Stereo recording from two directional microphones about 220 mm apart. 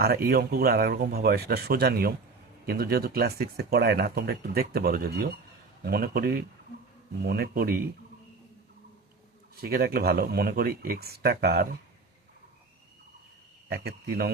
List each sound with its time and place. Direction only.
0.0 s speech: 45° right (ahead or behind)
9.6 s speech: 45° right (ahead or behind)
13.7 s speech: 45° right (ahead or behind)